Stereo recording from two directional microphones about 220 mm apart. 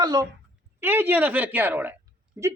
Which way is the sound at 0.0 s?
15° right (ahead or behind).